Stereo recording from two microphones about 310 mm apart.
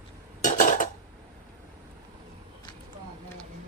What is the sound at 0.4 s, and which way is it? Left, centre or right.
Dishes, left.